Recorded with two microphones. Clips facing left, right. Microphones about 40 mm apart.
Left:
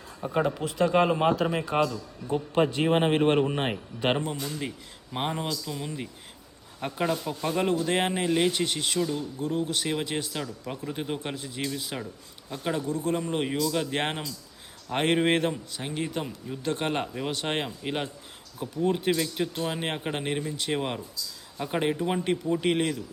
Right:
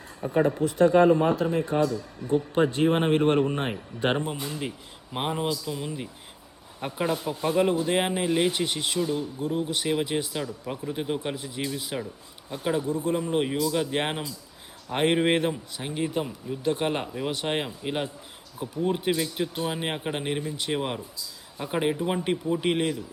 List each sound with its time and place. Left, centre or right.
0.6 s a man's voice: left
2.2 s speech: right
2.8 s speech: left
3.9 s speech: right
4.4 s speech: right
5.1 s speech: centre
11.3 s speech: centre
12.8 s speech: right
13.1 s speech: centre